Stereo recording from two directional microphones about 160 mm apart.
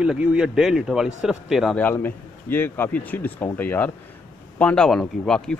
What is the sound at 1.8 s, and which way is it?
A man's voice, 10° left (ahead or behind).